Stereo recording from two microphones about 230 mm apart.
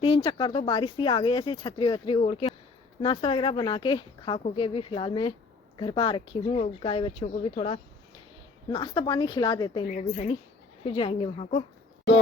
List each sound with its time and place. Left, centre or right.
0.0 s speech: left
10.8 s speech: left